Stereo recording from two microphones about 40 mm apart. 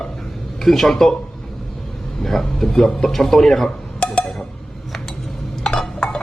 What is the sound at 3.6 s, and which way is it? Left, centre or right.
Dishes, left.